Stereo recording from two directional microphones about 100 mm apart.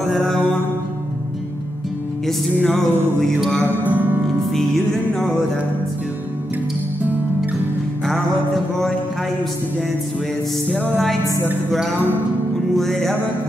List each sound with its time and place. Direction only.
2.2 s music: 5° left (ahead or behind)
3.8 s music: 20° right (ahead or behind)
4.5 s music: 5° left (ahead or behind)
10.7 s music: 5° left (ahead or behind)
12.7 s music: 5° left (ahead or behind)